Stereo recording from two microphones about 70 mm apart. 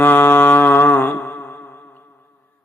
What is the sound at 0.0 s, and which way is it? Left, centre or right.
Mantra, left.